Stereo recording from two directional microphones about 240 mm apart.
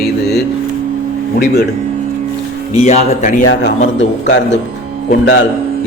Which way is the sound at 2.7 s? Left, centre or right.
Left.